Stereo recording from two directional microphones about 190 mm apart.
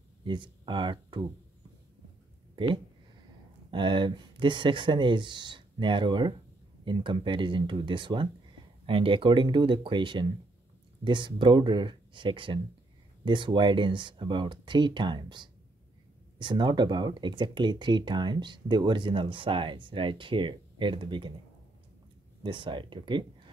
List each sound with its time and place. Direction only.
0.2 s speech: 25° right (ahead or behind)
3.7 s speech: 25° right (ahead or behind)
22.4 s speech: 25° right (ahead or behind)